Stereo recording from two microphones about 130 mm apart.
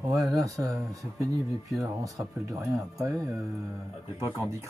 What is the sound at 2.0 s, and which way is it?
Speech, 25° right (ahead or behind).